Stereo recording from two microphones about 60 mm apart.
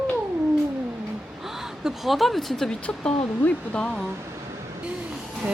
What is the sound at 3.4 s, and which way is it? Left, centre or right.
Speech, left.